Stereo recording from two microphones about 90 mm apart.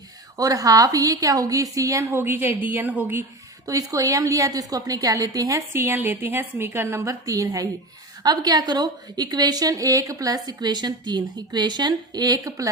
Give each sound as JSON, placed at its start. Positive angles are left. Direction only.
{"t": 0.3, "sound": "a woman's voice", "side_deg": -40}
{"t": 2.0, "sound": "speech", "side_deg": -25}
{"t": 3.7, "sound": "a woman's voice", "side_deg": -40}